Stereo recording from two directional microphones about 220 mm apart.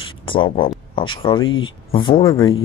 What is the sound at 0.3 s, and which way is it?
Speech, 25° left (ahead or behind).